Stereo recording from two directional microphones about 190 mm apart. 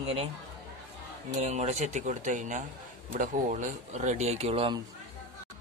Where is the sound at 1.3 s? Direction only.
35° right (ahead or behind).